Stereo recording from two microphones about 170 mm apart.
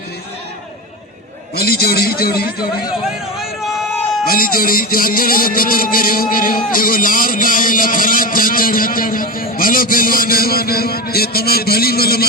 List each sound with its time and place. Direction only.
1.5 s a man's voice: 65° left (ahead or behind)
4.3 s speech: 60° left (ahead or behind)